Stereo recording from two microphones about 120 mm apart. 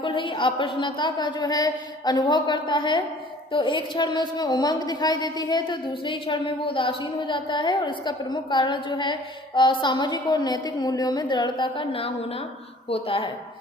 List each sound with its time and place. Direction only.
0.0 s a woman's voice: 45° left (ahead or behind)